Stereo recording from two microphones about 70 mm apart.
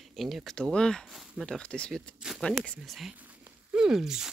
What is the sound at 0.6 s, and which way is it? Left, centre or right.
Speech, centre.